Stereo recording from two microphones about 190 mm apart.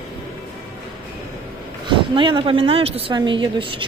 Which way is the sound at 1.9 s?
25° right (ahead or behind).